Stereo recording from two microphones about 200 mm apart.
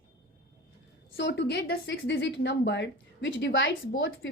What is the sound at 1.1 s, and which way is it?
Speech, 60° left (ahead or behind).